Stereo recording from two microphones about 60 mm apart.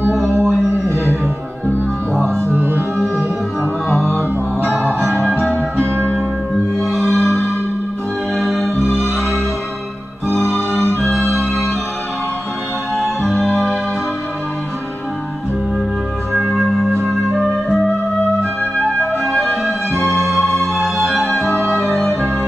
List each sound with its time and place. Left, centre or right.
0.1 s a sound: right
0.8 s music: right
2.5 s music: right
3.9 s music: centre
6.9 s music: centre
10.7 s music: left
11.0 s music: centre
12.9 s music: centre
19.2 s music: centre